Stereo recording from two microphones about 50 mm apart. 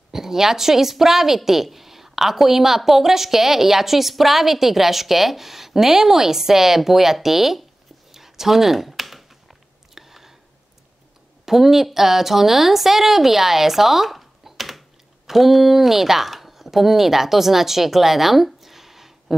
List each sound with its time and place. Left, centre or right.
0.1 s a woman's voice: centre
8.1 s a sound: centre
11.4 s a woman's voice: centre